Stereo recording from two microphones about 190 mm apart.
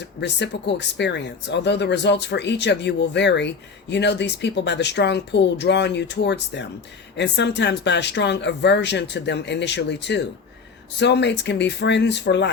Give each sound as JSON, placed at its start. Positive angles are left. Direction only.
{"t": 0.2, "sound": "speech", "side_deg": 65}